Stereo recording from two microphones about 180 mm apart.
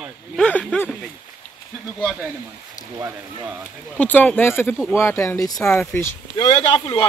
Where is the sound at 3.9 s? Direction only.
10° left (ahead or behind).